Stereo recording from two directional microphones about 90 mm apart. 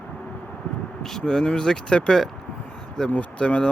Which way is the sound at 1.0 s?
5° left (ahead or behind).